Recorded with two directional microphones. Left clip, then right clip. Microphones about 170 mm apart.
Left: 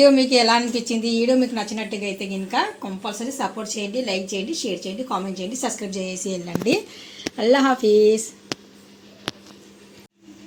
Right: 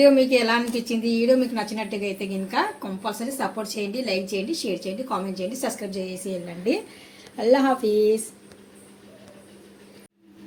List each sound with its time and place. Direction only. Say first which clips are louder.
0.0 s a woman's voice: left 2 dB; 40° left (ahead or behind)
5.9 s a woman's voice: left 3 dB; 45° left (ahead or behind)